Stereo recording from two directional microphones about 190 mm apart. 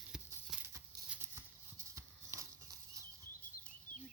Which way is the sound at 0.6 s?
15° right (ahead or behind).